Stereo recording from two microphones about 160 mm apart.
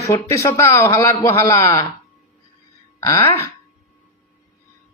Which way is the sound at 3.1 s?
30° left (ahead or behind).